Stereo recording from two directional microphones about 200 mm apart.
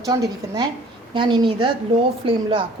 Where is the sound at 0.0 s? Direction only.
20° right (ahead or behind).